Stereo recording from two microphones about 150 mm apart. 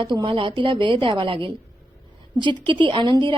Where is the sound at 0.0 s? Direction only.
35° right (ahead or behind).